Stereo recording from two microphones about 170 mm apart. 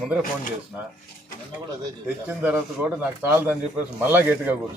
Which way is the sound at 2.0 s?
10° right (ahead or behind).